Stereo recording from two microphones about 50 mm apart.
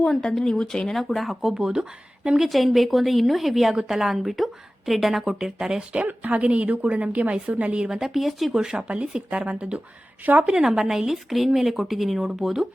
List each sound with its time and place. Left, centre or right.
0.0 s speech: centre
1.0 s a woman's voice: centre
2.5 s a woman's voice: centre
6.1 s a woman's voice: right
7.9 s speech: centre
8.5 s a woman's voice: centre
10.4 s a woman's voice: centre